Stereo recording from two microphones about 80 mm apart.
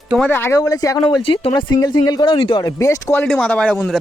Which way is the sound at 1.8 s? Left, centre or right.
Left.